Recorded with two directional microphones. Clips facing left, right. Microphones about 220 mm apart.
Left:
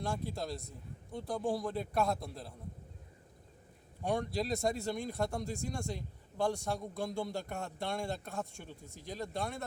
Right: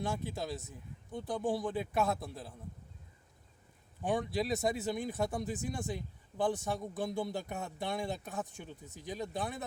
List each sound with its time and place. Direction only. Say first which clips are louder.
0.0 s speech: right 1 dB; centre (ahead or behind)
4.0 s speech: right 1 dB; 5° right (ahead or behind)